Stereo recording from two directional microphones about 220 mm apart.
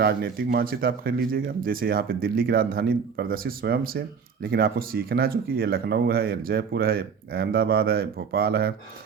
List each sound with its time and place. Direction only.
0.0 s speech: 45° right (ahead or behind)